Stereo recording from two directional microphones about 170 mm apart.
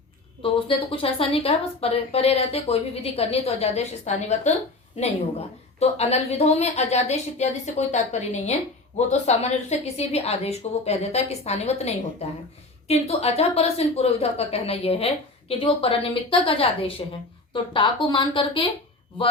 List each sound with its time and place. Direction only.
0.4 s speech: 30° left (ahead or behind)